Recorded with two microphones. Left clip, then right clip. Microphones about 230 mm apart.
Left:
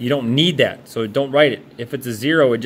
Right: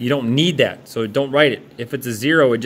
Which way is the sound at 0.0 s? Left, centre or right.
Centre.